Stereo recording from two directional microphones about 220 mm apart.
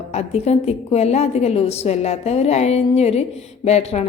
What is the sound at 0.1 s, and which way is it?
A woman's voice, 30° left (ahead or behind).